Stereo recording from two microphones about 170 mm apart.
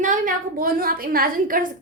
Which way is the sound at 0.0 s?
50° right (ahead or behind).